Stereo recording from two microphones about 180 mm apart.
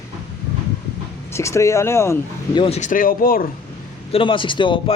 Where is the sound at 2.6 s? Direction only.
35° left (ahead or behind); by 3.4 s 55° left (ahead or behind).